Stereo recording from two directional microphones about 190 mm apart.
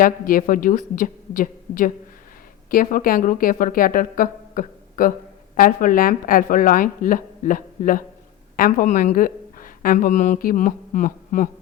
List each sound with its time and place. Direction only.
0.0 s a woman's voice: 45° left (ahead or behind)